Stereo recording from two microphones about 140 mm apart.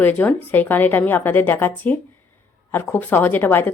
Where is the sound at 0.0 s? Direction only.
10° left (ahead or behind).